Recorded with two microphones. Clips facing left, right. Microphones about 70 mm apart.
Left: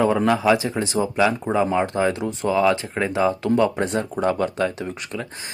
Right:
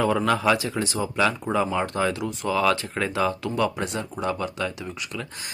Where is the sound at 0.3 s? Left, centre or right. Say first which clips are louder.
Left 3 dB; centre.